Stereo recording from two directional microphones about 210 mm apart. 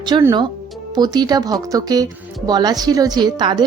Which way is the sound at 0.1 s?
15° right (ahead or behind).